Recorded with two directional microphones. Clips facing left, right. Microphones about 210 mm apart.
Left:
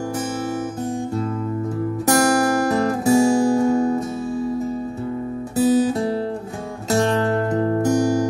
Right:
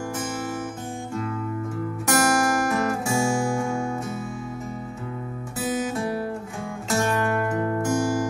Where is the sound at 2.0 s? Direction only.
35° left (ahead or behind).